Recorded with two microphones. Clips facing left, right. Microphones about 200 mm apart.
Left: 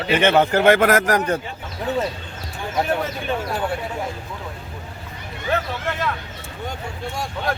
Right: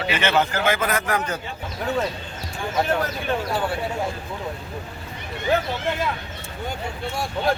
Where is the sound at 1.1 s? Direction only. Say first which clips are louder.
Left 5 dB; 35° left (ahead or behind).